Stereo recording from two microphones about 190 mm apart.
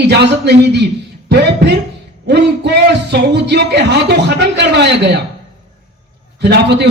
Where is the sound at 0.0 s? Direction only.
60° right (ahead or behind).